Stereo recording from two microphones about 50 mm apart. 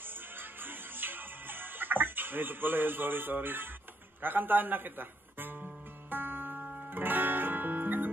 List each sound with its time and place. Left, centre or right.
0.4 s music: right
4.2 s speech: right
6.0 s music: right